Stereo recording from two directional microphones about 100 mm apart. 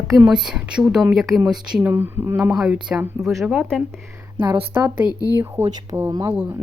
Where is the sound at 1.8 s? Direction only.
20° right (ahead or behind).